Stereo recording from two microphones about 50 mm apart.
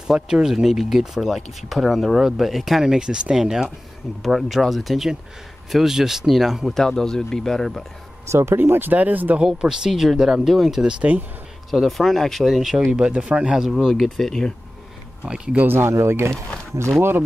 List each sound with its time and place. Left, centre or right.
0.0 s speech: centre
6.7 s speech: centre
8.3 s speech: right
8.5 s speech: right
9.4 s speech: centre
10.9 s speech: right
11.7 s speech: centre
13.1 s speech: right
13.6 s speech: centre
15.2 s speech: centre
15.5 s speech: right
15.9 s speech: right